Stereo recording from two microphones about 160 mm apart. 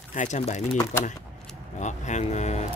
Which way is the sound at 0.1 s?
50° left (ahead or behind).